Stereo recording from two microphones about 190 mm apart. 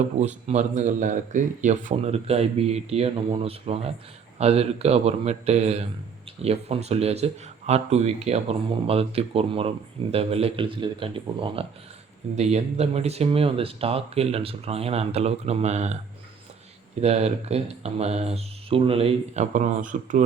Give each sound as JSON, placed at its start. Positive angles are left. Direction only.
{"t": 0.0, "sound": "speech", "side_deg": -35}
{"t": 17.0, "sound": "speech", "side_deg": -35}